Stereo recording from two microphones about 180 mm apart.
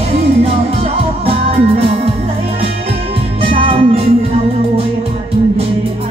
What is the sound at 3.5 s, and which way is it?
Music, 30° right (ahead or behind).